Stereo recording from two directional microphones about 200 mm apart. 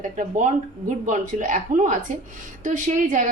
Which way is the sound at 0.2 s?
40° right (ahead or behind).